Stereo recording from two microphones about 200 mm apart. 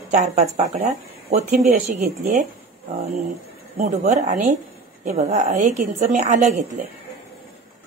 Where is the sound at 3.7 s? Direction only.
35° right (ahead or behind).